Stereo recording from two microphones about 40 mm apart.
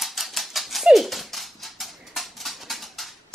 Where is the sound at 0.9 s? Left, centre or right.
Centre.